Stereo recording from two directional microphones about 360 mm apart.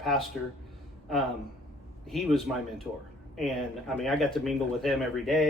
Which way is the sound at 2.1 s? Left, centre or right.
Centre.